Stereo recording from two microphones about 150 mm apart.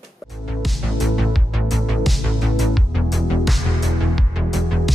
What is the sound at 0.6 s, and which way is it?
Music, centre (ahead or behind).